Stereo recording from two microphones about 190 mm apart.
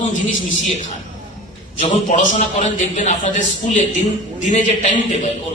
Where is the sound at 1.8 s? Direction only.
40° left (ahead or behind).